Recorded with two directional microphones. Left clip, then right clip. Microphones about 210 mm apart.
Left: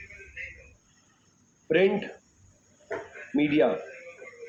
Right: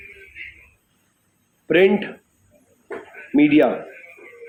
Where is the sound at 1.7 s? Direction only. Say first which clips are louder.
Right 7 dB; 50° right (ahead or behind).